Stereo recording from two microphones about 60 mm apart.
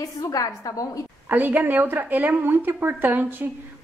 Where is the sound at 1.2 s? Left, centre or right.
Right.